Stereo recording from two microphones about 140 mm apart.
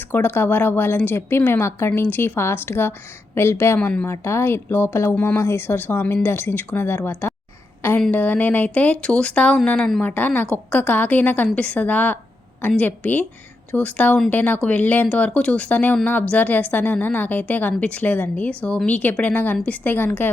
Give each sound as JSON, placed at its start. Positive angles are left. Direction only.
{"t": 0.1, "sound": "a woman's voice", "side_deg": 15}